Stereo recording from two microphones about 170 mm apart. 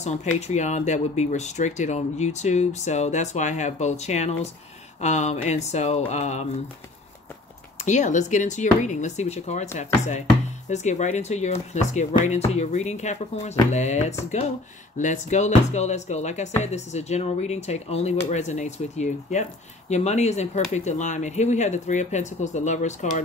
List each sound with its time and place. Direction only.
0.0 s speech: 40° left (ahead or behind)
7.8 s speech: 45° left (ahead or behind)
10.7 s speech: 45° left (ahead or behind)